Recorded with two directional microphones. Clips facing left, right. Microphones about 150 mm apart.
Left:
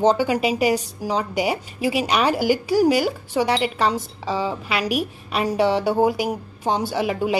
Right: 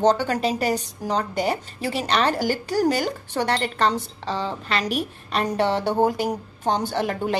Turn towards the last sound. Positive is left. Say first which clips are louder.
# left 2 dB
turn(degrees=5)  # may be behind; listen again after turning